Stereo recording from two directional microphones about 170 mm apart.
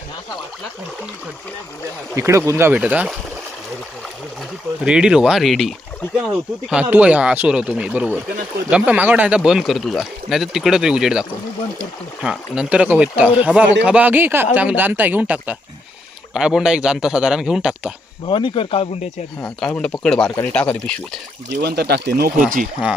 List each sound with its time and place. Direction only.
2.1 s speech: 15° right (ahead or behind)
4.9 s speech: 5° right (ahead or behind)
18.3 s speech: 30° left (ahead or behind)
19.4 s speech: 5° left (ahead or behind)
21.6 s speech: 70° right (ahead or behind)